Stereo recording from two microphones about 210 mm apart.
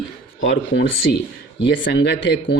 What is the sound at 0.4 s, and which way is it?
Speech, 60° left (ahead or behind).